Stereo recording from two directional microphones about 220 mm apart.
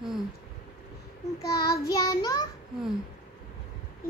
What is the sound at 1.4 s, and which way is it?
Child singing, 45° left (ahead or behind).